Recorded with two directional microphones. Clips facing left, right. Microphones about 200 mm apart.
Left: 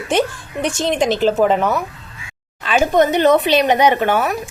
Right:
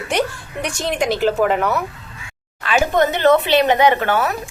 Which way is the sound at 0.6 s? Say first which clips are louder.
Left 3 dB; 25° left (ahead or behind).